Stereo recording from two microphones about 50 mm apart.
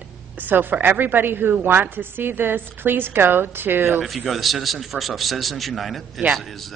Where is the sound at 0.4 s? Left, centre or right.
Right.